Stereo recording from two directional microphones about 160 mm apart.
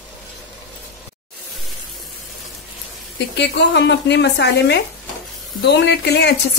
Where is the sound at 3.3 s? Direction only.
90° left.